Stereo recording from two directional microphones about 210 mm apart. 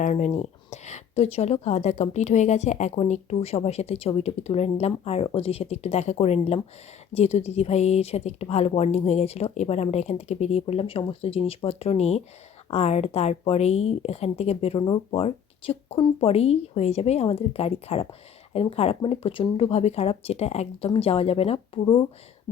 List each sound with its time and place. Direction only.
0.0 s speech: 35° left (ahead or behind)